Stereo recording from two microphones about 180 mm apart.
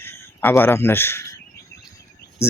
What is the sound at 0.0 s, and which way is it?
A man's voice, 10° left (ahead or behind).